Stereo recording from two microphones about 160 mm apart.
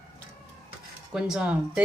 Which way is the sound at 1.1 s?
5° right (ahead or behind).